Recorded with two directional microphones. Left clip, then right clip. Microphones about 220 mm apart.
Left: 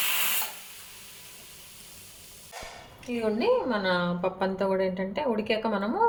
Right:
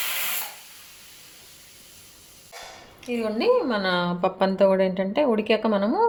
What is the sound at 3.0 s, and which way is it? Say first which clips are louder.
A woman's voice: right 3 dB; 40° right (ahead or behind).